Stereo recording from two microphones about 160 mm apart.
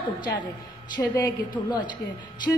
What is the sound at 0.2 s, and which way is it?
A woman's voice, 30° left (ahead or behind).